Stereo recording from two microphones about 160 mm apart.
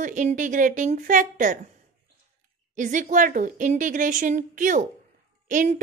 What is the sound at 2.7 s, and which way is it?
A woman's voice, 50° right (ahead or behind).